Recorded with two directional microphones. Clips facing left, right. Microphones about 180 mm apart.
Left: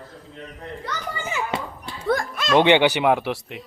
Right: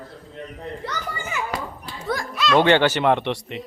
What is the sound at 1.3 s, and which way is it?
Speech, 25° left (ahead or behind).